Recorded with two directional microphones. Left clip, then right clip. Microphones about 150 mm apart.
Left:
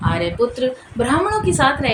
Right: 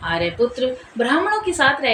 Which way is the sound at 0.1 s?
45° left (ahead or behind).